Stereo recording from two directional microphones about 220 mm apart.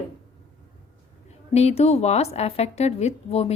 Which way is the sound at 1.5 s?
30° left (ahead or behind).